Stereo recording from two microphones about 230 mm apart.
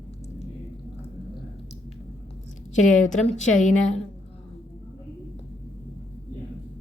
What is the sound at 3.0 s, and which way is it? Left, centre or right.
Speech, left.